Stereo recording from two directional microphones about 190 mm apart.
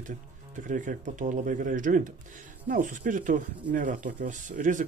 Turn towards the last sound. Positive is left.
turn(degrees=-40)  # may be behind; listen again after turning